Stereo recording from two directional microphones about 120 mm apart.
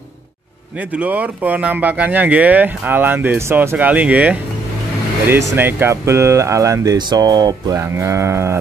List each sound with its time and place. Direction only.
0.7 s speech: 15° right (ahead or behind); by 7.8 s 35° right (ahead or behind)
7.8 s speech: 25° right (ahead or behind)